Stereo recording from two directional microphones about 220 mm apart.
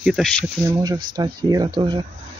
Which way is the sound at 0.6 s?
15° right (ahead or behind).